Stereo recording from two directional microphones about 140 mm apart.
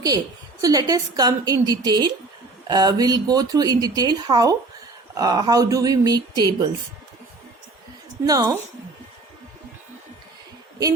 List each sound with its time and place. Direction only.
0.6 s speech: 25° right (ahead or behind)
8.3 s speech: 30° right (ahead or behind)